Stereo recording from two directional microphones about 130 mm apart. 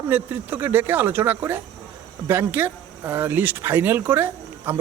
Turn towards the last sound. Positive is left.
turn(degrees=-15)  # may be behind; listen again after turning